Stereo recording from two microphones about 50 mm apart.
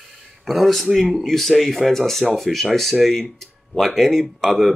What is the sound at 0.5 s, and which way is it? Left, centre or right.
Speech, centre.